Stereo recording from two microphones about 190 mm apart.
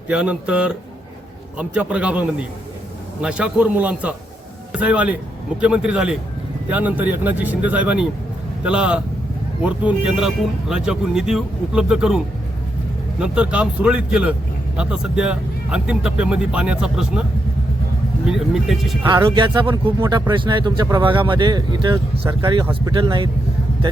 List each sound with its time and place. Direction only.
0.1 s speech: 5° right (ahead or behind)
18.3 s speech: centre (ahead or behind)
19.0 s speech: 25° right (ahead or behind)